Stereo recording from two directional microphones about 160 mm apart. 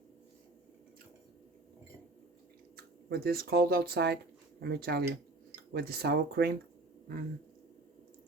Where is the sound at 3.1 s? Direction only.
70° right (ahead or behind).